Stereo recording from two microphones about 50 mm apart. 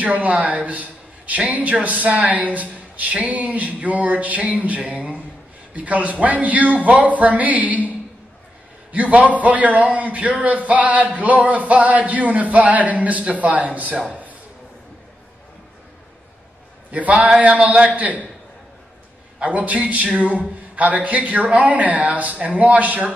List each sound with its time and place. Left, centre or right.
0.0 s a man's voice: right
8.9 s a man's voice: right
14.0 s a sound: right
16.9 s a man's voice: right
19.4 s a man's voice: right